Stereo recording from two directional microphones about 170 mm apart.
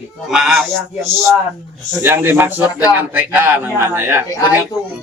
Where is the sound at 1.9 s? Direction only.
10° right (ahead or behind).